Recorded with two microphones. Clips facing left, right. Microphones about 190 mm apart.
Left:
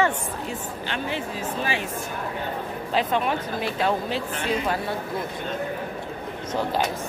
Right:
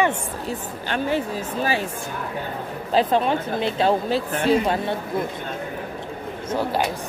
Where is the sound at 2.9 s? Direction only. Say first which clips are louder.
Right 5 dB; 30° right (ahead or behind).